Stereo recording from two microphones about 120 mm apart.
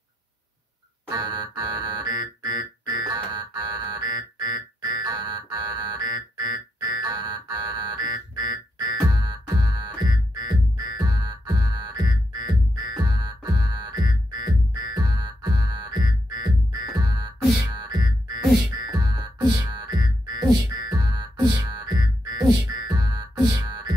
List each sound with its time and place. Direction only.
1.1 s music: 35° right (ahead or behind)